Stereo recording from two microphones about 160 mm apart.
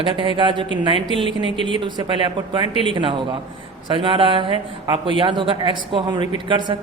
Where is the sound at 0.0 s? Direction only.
30° right (ahead or behind).